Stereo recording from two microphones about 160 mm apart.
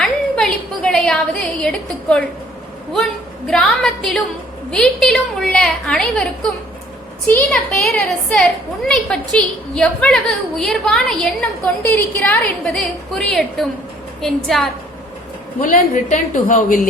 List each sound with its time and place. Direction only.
0.0 s a woman's voice: 5° left (ahead or behind)
15.6 s a woman's voice: 55° left (ahead or behind)